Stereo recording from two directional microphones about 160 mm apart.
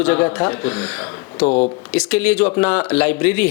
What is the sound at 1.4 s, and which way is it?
Speech, 45° left (ahead or behind).